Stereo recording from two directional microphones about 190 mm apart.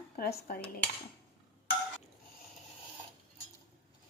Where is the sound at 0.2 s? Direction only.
50° left (ahead or behind).